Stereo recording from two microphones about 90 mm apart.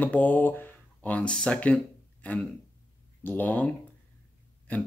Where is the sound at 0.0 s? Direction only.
20° left (ahead or behind).